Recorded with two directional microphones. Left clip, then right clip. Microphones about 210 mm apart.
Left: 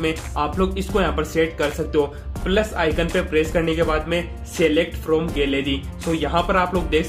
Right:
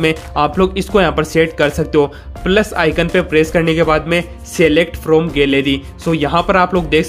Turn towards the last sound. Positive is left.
turn(degrees=-35)  # may be behind; listen again after turning